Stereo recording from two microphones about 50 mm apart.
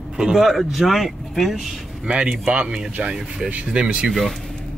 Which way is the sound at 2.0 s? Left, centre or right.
Centre.